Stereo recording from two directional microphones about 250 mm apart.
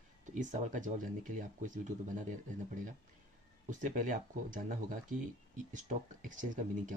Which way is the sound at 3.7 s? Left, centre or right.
Right.